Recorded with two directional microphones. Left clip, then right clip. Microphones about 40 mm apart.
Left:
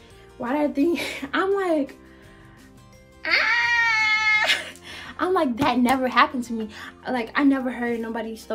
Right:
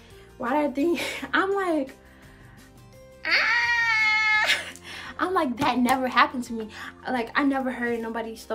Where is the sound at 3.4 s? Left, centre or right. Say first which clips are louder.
Left 2 dB; right.